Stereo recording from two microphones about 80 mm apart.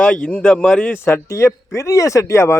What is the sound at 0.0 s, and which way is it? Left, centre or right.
A man's voice, centre.